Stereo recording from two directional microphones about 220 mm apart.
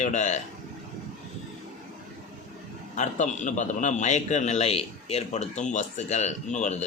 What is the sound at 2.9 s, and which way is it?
A man's voice, 35° left (ahead or behind).